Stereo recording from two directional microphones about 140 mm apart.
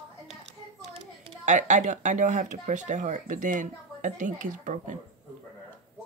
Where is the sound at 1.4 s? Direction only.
60° right (ahead or behind).